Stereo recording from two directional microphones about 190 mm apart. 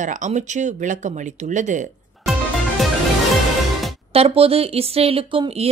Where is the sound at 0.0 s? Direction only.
40° right (ahead or behind).